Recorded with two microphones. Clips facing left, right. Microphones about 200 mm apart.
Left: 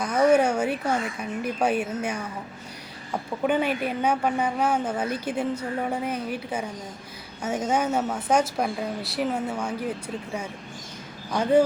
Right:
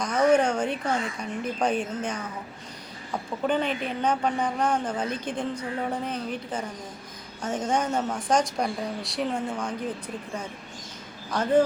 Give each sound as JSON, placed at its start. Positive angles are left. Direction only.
{"t": 0.0, "sound": "a woman's voice", "side_deg": 5}
{"t": 3.4, "sound": "a woman's voice", "side_deg": 10}
{"t": 11.3, "sound": "a woman's voice", "side_deg": 10}